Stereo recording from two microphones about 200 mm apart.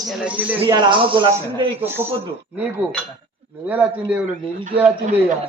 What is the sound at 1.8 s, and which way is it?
Speech, 10° right (ahead or behind).